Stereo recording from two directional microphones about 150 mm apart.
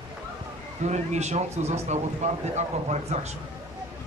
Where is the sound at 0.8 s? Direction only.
50° right (ahead or behind).